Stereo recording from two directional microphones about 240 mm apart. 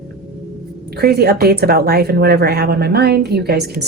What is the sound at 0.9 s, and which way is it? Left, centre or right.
Speech, right.